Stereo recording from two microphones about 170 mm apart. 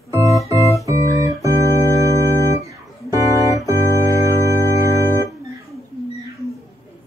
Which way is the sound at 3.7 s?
15° left (ahead or behind).